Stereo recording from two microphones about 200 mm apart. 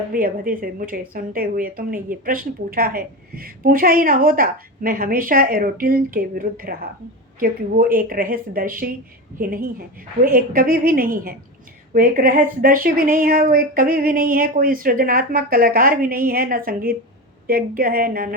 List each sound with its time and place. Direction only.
0.1 s a woman's voice: 45° right (ahead or behind)